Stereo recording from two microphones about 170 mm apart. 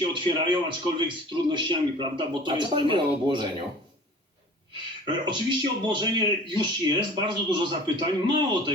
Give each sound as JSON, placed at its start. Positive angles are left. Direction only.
{"t": 0.0, "sound": "speech", "side_deg": -30}
{"t": 5.0, "sound": "speech", "side_deg": -30}